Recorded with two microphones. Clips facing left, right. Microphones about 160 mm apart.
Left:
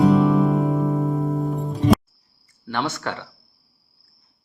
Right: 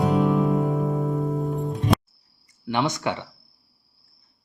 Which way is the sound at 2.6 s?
15° right (ahead or behind).